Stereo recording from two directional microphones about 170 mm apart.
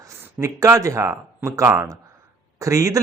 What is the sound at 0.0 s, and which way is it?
Speech, 15° right (ahead or behind).